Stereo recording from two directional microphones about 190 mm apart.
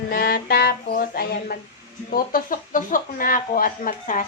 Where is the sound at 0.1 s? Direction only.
50° left (ahead or behind).